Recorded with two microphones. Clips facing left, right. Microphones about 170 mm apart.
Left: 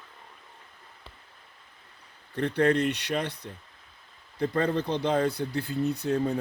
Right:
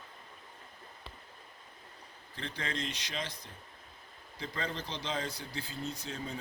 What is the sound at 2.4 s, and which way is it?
Speech, 60° left (ahead or behind).